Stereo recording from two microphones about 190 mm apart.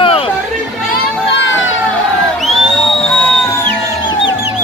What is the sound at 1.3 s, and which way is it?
Children playing, 85° left.